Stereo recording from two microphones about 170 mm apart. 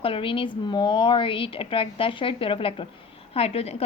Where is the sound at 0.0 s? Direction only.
30° left (ahead or behind).